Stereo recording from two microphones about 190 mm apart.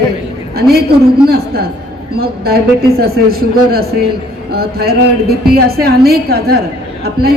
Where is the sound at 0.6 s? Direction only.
55° right (ahead or behind).